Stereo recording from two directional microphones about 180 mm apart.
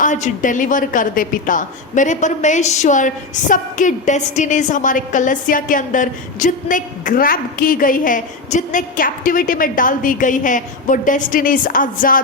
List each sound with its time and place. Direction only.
0.0 s a woman's voice: 45° left (ahead or behind)